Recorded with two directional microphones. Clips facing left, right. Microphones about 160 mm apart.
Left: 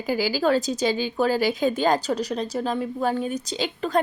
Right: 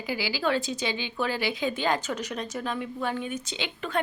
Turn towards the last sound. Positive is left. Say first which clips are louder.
# left 7 dB
turn(degrees=40)  # may be behind; listen again after turning